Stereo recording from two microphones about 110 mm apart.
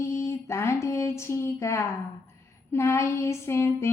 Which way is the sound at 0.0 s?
25° left (ahead or behind).